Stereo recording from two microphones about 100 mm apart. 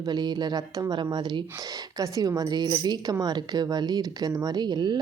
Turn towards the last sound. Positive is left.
turn(degrees=-45)  # may be behind; listen again after turning